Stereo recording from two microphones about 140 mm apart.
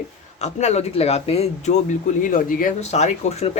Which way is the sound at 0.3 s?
55° left (ahead or behind).